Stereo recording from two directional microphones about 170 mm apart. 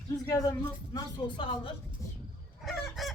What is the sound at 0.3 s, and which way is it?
Speech, 20° left (ahead or behind).